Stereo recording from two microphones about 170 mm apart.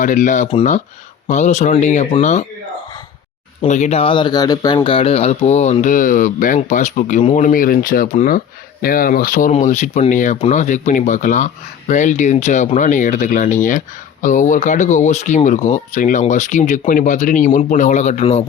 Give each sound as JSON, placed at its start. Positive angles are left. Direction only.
{"t": 0.0, "sound": "speech", "side_deg": 50}
{"t": 3.7, "sound": "speech", "side_deg": 40}